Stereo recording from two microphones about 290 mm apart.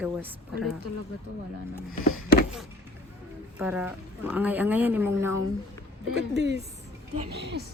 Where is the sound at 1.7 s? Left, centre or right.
Left.